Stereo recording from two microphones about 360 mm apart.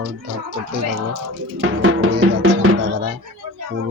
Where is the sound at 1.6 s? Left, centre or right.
Right.